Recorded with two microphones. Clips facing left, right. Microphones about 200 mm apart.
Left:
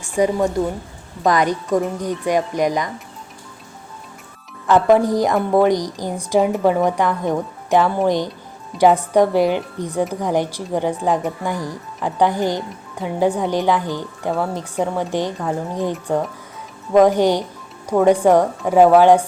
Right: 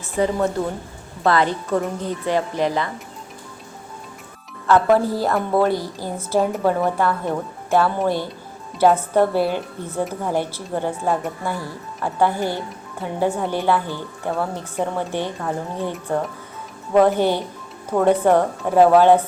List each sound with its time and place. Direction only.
0.0 s speech: 15° left (ahead or behind)
4.6 s speech: 15° left (ahead or behind)